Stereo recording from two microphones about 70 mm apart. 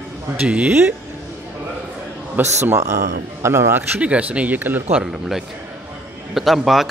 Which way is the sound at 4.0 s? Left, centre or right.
Centre.